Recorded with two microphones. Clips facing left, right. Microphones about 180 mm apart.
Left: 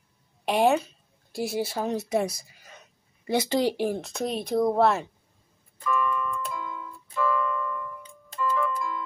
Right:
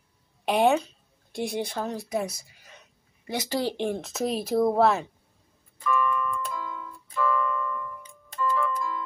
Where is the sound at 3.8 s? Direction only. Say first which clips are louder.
Right 1 dB; centre (ahead or behind).